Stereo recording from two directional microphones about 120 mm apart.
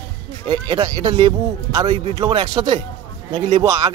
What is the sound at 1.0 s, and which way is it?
Speech, 45° right (ahead or behind).